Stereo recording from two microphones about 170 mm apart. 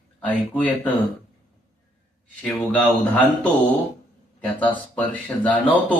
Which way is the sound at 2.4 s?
5° left (ahead or behind).